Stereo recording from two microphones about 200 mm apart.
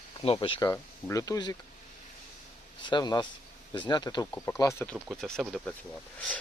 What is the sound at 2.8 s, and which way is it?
Speech, 20° left (ahead or behind).